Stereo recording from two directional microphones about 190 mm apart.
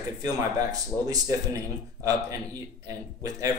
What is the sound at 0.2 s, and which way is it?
Speech, 20° right (ahead or behind).